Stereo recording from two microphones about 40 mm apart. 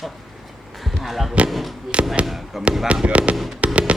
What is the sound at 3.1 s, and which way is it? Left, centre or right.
Speech, right.